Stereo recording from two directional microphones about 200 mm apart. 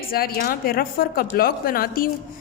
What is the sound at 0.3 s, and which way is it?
A woman's voice, 45° left (ahead or behind).